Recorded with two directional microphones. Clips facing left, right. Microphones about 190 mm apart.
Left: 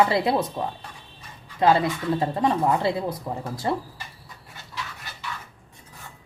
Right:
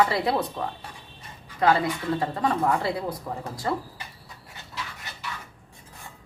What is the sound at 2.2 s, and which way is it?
Speech, 20° left (ahead or behind).